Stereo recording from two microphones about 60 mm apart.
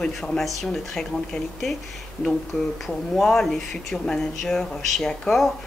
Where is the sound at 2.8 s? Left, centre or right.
Centre.